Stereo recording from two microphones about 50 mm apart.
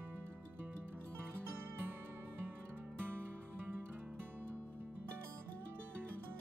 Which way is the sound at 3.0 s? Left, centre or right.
Right.